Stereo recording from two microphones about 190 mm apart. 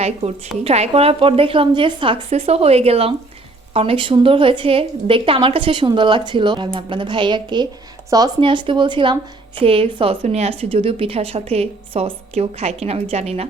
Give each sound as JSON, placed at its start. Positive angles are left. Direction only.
{"t": 0.0, "sound": "a woman's voice", "side_deg": -35}